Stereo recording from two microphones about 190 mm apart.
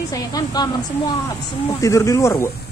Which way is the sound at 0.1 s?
20° left (ahead or behind).